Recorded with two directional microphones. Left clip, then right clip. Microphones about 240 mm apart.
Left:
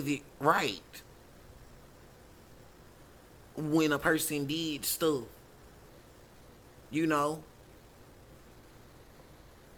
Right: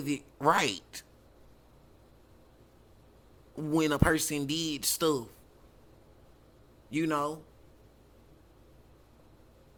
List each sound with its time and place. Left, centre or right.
0.0 s speech: centre
3.5 s a man's voice: centre
6.9 s a man's voice: centre